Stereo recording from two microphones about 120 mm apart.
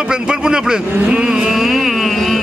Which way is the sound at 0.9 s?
10° right (ahead or behind).